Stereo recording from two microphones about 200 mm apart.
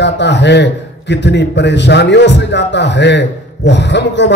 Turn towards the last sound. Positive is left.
turn(degrees=60)  # may be behind; listen again after turning